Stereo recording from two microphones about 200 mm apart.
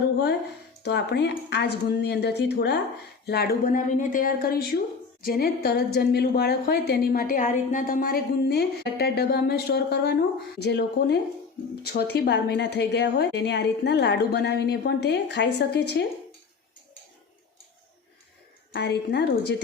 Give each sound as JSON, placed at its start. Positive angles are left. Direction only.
{"t": 0.8, "sound": "a woman's voice", "side_deg": 55}
{"t": 18.7, "sound": "a woman's voice", "side_deg": 55}